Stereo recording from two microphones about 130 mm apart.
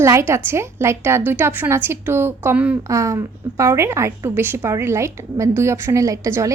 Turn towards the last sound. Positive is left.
turn(degrees=-25)  # may be behind; listen again after turning